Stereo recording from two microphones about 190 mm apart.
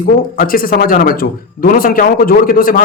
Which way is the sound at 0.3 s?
50° left (ahead or behind).